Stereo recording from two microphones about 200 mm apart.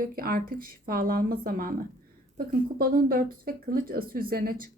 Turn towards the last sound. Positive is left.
turn(degrees=-45)  # may be behind; listen again after turning